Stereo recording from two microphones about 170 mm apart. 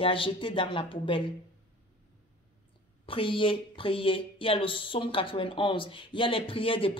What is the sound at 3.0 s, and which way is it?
Speech, 30° left (ahead or behind).